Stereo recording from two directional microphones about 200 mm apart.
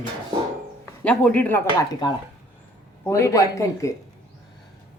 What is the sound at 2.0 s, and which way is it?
A woman's voice, 20° left (ahead or behind).